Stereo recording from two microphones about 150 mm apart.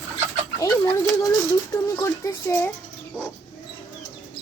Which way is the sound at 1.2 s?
25° left (ahead or behind).